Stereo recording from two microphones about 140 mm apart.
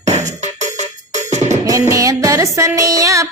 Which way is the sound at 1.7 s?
25° right (ahead or behind).